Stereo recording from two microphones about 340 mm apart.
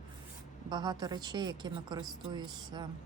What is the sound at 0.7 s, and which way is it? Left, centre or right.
A woman's voice, centre.